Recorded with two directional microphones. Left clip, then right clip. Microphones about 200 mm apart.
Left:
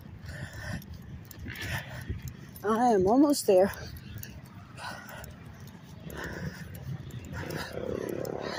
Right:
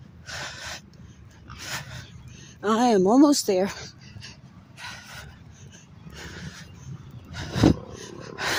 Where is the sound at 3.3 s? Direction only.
20° right (ahead or behind).